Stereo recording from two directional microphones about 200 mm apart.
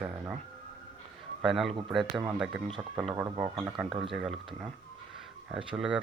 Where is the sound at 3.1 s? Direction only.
15° right (ahead or behind).